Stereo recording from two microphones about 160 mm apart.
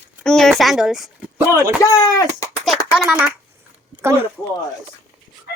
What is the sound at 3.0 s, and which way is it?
Speech, 5° right (ahead or behind).